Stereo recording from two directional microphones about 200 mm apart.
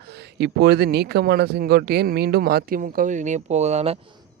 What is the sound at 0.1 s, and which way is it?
Speech, 55° right (ahead or behind).